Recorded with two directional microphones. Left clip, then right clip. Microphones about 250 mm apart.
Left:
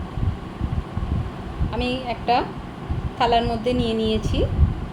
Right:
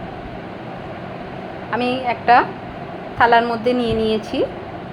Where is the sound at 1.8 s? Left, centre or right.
Right.